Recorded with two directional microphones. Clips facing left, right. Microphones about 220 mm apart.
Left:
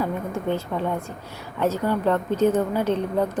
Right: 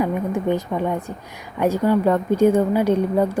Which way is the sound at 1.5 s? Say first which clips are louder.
Right 5 dB; 15° right (ahead or behind).